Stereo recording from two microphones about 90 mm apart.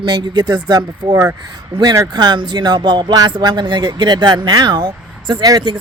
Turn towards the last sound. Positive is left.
turn(degrees=-65)  # may be behind; listen again after turning